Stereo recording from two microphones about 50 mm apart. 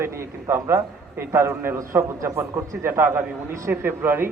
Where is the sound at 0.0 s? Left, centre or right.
Right.